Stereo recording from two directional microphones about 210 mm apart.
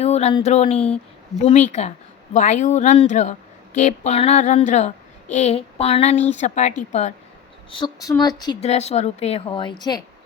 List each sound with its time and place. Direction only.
0.0 s a woman's voice: 30° left (ahead or behind)
7.7 s a woman's voice: 20° left (ahead or behind)
8.6 s a woman's voice: 30° left (ahead or behind)